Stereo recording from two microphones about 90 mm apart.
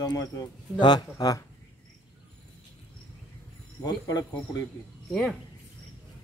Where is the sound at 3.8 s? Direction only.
45° left (ahead or behind).